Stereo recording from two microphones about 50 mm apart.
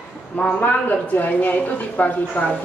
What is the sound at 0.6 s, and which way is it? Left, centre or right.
Speech, left.